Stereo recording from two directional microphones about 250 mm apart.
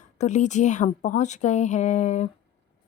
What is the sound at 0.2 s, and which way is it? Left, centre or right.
A woman's voice, left.